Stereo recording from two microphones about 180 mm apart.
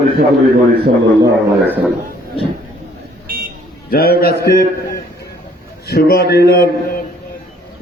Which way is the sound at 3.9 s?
55° left (ahead or behind).